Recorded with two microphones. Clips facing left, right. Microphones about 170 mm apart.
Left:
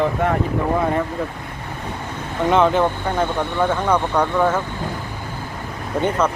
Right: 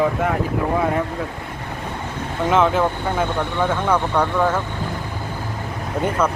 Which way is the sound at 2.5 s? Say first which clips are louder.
Left 1 dB; centre (ahead or behind).